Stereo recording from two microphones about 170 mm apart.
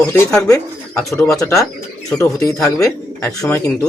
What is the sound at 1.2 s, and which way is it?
Speech, 5° left (ahead or behind).